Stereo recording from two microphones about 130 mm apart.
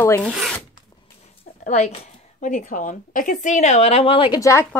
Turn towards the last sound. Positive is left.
turn(degrees=25)  # may be behind; listen again after turning